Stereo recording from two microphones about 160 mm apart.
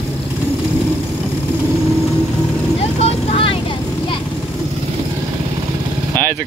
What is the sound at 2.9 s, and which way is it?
Vehicle, 35° left (ahead or behind).